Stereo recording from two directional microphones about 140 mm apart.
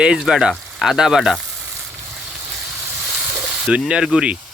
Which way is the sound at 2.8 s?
20° right (ahead or behind).